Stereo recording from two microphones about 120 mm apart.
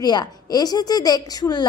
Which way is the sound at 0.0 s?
35° left (ahead or behind).